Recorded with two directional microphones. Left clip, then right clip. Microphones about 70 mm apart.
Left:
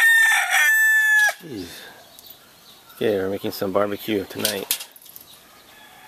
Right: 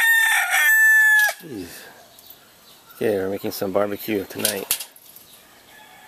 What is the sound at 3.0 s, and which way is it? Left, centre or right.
Speech, centre.